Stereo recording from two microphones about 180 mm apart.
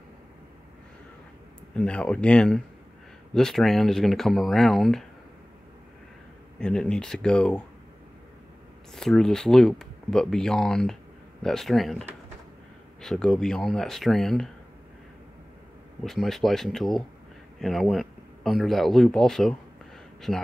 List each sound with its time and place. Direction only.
1.8 s speech: 5° left (ahead or behind)
6.6 s speech: 5° left (ahead or behind)
8.9 s speech: 5° left (ahead or behind)
16.0 s speech: centre (ahead or behind)